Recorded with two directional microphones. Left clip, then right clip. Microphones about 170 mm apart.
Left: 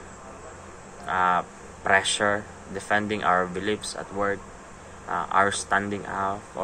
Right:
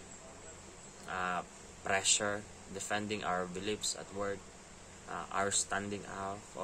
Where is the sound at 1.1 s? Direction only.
20° right (ahead or behind).